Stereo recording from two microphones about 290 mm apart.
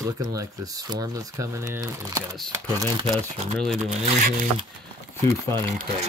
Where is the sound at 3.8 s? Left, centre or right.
Right.